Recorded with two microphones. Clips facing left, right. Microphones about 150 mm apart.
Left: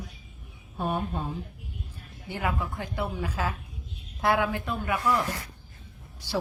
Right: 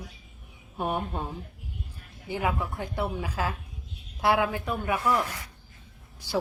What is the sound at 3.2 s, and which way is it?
Speech, 5° right (ahead or behind).